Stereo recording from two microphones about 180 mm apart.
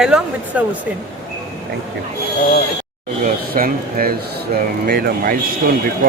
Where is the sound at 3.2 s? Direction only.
55° right (ahead or behind).